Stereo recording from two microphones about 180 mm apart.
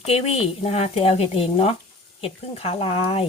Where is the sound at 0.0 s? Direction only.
35° left (ahead or behind).